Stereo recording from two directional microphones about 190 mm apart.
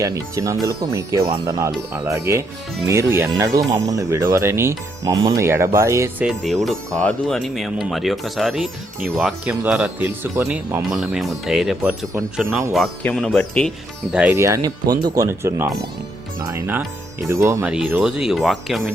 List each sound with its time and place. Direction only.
0.0 s speech: 15° right (ahead or behind)
6.2 s speech: centre (ahead or behind); by 17.7 s 15° right (ahead or behind)
17.7 s speech: 5° right (ahead or behind)